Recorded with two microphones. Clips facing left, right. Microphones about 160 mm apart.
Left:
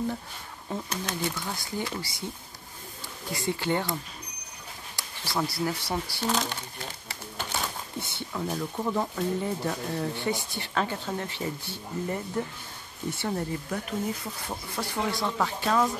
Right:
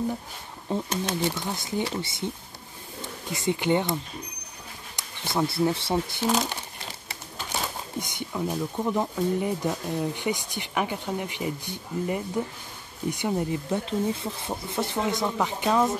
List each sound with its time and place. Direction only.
0.7 s speech: 25° right (ahead or behind)
6.2 s speech: 15° right (ahead or behind)